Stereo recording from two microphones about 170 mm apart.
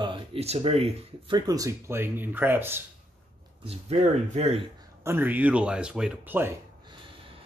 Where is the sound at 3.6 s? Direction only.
40° right (ahead or behind).